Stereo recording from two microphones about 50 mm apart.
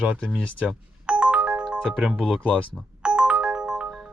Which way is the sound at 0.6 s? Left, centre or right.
Centre.